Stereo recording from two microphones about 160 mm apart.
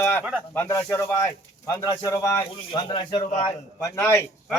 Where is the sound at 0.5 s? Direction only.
15° left (ahead or behind).